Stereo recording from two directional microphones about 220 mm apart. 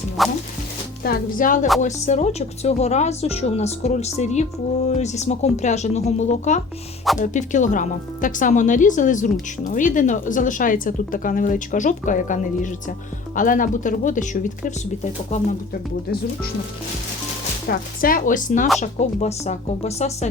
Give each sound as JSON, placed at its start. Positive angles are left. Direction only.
{"t": 0.2, "sound": "music", "side_deg": 0}
{"t": 1.0, "sound": "a woman's voice", "side_deg": 40}
{"t": 17.7, "sound": "a woman's voice", "side_deg": 40}